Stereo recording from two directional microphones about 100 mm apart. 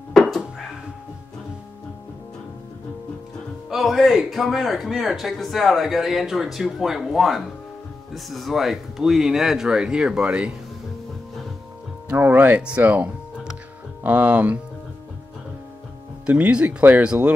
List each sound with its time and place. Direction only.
0.1 s a sound: centre (ahead or behind)
3.7 s speech: centre (ahead or behind)
12.1 s speech: 15° right (ahead or behind)
16.3 s speech: 10° right (ahead or behind)